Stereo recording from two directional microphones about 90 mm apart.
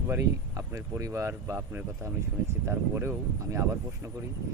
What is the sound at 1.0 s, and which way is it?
Speech, 35° right (ahead or behind).